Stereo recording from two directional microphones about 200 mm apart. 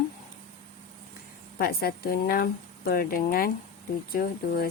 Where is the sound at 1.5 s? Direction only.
50° left (ahead or behind).